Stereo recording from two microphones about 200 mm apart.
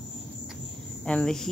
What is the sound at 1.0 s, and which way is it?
Speech, 5° left (ahead or behind).